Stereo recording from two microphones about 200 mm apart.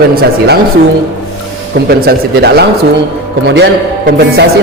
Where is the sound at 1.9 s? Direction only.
50° right (ahead or behind).